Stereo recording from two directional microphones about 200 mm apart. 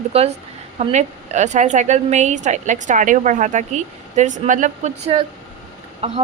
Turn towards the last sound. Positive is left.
turn(degrees=-30)  # may be behind; listen again after turning